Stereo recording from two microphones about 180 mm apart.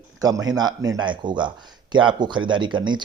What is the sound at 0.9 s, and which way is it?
Speech, 25° right (ahead or behind).